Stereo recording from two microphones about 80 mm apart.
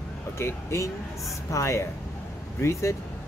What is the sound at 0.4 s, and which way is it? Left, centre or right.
Speech, left.